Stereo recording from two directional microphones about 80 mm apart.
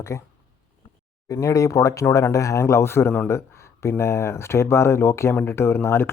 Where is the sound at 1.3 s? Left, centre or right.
Left.